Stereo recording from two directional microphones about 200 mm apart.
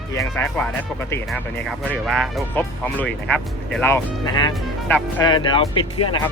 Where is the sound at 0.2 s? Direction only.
10° left (ahead or behind).